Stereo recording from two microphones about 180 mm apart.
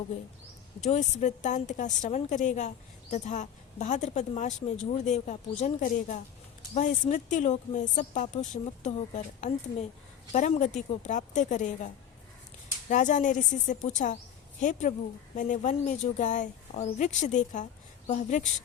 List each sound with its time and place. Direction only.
0.9 s a woman's voice: 40° left (ahead or behind)
12.9 s a woman's voice: 45° left (ahead or behind)